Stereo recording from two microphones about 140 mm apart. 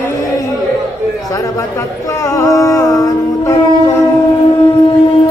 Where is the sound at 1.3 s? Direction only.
25° left (ahead or behind).